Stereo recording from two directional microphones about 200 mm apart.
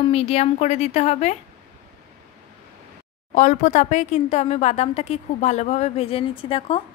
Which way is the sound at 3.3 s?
40° left (ahead or behind).